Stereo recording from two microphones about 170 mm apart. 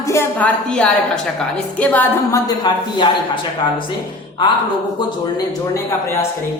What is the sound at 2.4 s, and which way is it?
A woman's voice, 25° left (ahead or behind).